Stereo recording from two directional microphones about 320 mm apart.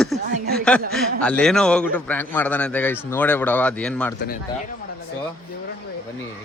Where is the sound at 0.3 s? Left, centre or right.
Right.